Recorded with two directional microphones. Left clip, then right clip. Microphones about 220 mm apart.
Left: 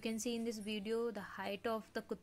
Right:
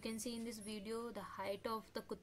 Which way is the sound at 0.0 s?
15° left (ahead or behind).